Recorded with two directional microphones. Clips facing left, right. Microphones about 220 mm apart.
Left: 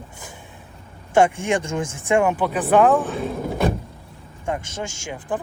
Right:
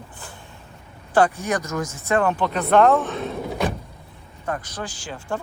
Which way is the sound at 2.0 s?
10° left (ahead or behind).